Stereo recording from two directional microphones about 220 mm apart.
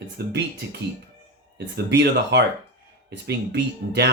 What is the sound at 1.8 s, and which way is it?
Speech, 50° right (ahead or behind).